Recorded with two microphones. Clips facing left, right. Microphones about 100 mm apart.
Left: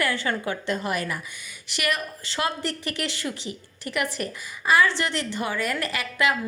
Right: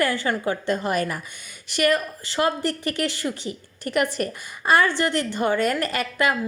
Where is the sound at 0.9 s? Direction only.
45° right (ahead or behind).